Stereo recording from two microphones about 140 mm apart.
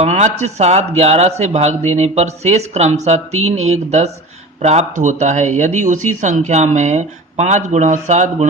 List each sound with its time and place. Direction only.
0.0 s speech: 55° right (ahead or behind)